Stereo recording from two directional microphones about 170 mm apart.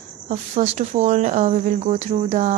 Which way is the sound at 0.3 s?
40° right (ahead or behind).